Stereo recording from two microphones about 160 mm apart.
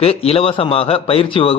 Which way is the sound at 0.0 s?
40° left (ahead or behind).